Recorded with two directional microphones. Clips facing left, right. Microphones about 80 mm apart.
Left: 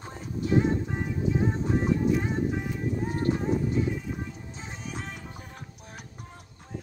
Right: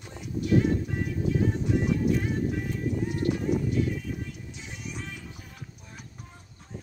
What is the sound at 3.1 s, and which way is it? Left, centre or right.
Music, left.